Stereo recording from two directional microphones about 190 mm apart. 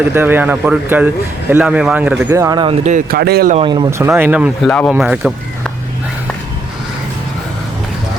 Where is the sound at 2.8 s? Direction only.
45° right (ahead or behind).